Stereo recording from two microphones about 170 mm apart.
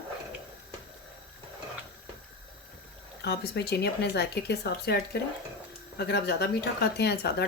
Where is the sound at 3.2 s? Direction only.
70° left (ahead or behind).